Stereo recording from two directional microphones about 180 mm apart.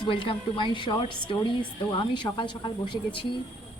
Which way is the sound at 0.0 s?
30° left (ahead or behind).